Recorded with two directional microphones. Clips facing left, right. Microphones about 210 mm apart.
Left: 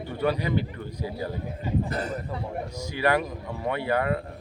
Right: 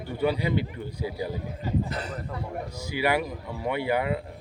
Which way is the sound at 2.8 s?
10° right (ahead or behind).